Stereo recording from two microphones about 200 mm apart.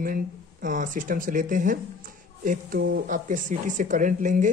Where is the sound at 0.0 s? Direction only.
45° right (ahead or behind).